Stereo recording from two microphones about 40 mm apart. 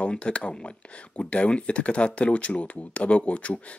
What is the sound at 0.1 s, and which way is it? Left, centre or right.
Speech, left.